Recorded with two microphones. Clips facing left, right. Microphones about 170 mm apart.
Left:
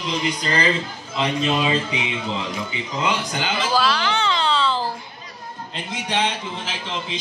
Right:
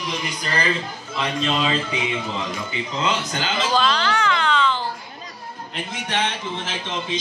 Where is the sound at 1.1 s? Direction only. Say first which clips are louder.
Left 2 dB; 15° left (ahead or behind).